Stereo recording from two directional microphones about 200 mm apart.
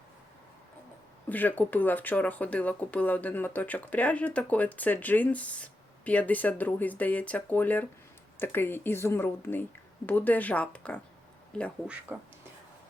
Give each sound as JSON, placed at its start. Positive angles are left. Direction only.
{"t": 1.3, "sound": "speech", "side_deg": 10}
{"t": 11.9, "sound": "speech", "side_deg": -5}